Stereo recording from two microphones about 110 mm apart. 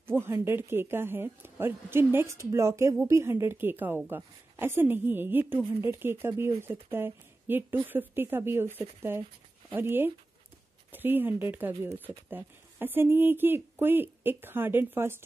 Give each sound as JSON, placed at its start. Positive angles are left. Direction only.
{"t": 0.0, "sound": "speech", "side_deg": -20}